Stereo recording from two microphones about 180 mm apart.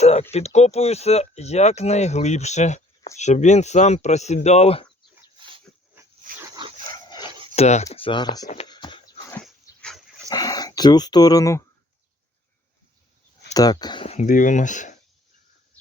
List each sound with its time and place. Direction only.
0.0 s speech: 35° left (ahead or behind)
6.9 s dog: 25° left (ahead or behind)
7.5 s speech: 35° left (ahead or behind)
8.6 s a sound: 25° left (ahead or behind)
10.2 s speech: 20° left (ahead or behind)
13.5 s speech: 20° left (ahead or behind); by 14.9 s 45° left (ahead or behind)